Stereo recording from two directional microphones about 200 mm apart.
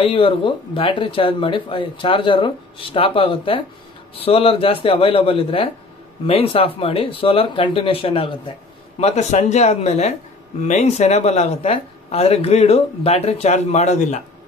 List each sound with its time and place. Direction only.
0.0 s speech: 25° left (ahead or behind)